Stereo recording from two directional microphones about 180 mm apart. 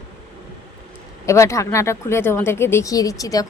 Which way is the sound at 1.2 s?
15° left (ahead or behind).